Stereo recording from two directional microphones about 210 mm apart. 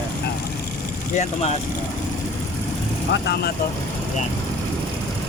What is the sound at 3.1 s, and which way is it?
Speech, 50° left (ahead or behind).